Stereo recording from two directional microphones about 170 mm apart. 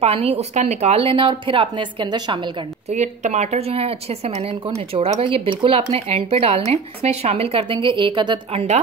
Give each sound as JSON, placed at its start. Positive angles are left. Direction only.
{"t": 0.0, "sound": "speech", "side_deg": -35}
{"t": 2.9, "sound": "speech", "side_deg": -45}